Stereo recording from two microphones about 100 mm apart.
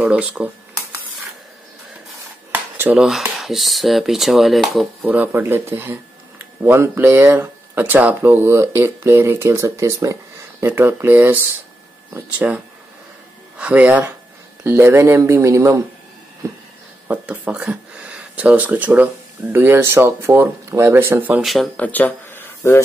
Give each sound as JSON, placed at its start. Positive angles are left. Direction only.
{"t": 0.0, "sound": "speech", "side_deg": -15}
{"t": 2.5, "sound": "dishes", "side_deg": -20}
{"t": 3.0, "sound": "speech", "side_deg": -5}
{"t": 5.0, "sound": "speech", "side_deg": -15}
{"t": 17.1, "sound": "speech", "side_deg": -10}
{"t": 21.4, "sound": "speech", "side_deg": 0}
{"t": 21.7, "sound": "speech", "side_deg": 15}